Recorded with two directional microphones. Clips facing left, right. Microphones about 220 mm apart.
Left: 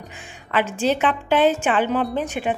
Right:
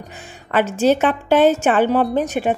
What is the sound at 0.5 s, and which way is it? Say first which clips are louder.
A woman's voice: right 5 dB; 45° right (ahead or behind).